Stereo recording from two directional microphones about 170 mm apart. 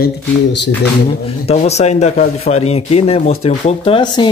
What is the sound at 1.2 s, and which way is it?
Speech, 35° left (ahead or behind).